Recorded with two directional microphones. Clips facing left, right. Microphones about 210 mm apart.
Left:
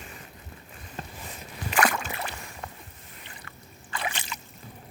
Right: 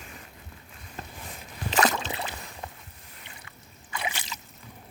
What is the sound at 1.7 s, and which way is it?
Rowboat, 20° right (ahead or behind).